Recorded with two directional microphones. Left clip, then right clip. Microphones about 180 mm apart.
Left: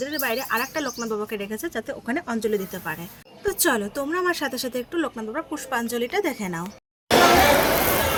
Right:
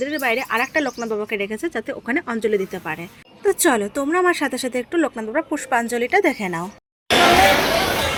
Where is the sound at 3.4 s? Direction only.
35° right (ahead or behind).